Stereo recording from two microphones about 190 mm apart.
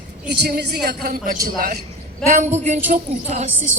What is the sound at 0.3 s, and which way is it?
A woman's voice, 60° right (ahead or behind).